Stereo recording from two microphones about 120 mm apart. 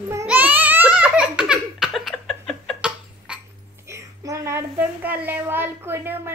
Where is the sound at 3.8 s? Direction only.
25° right (ahead or behind).